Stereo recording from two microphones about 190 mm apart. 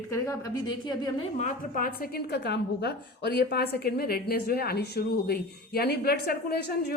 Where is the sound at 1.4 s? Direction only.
45° left (ahead or behind).